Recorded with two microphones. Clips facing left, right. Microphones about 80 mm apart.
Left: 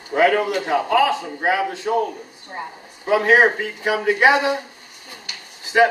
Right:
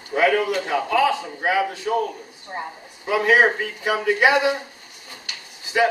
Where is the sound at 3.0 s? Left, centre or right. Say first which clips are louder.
Left 2 dB; left.